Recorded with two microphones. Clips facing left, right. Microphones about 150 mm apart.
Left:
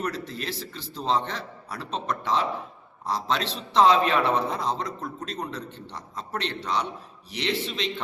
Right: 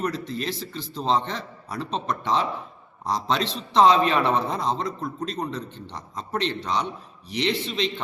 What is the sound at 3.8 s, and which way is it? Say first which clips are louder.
Speech: right 2 dB; 5° left (ahead or behind).